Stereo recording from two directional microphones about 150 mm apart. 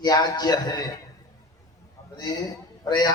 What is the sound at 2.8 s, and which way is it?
Speech, 25° left (ahead or behind).